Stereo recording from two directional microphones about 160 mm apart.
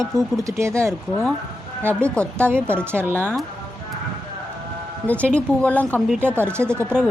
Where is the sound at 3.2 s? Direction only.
10° left (ahead or behind).